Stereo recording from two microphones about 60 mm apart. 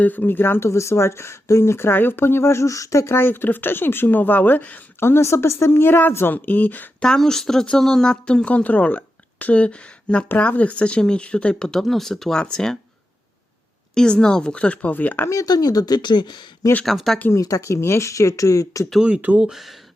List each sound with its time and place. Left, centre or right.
0.0 s speech: left
0.7 s speech: left
3.2 s speech: left
5.0 s speech: left
7.0 s speech: centre
11.8 s speech: centre
13.9 s speech: centre; by 15.3 s left
15.3 s speech: left
16.8 s speech: centre
17.3 s speech: left
19.0 s speech: right
19.5 s speech: centre